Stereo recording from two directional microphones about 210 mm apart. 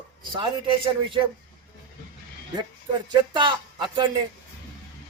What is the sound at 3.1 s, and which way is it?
A man's voice, 20° right (ahead or behind).